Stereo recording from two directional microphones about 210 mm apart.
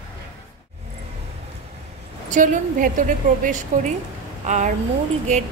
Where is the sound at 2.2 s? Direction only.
35° right (ahead or behind).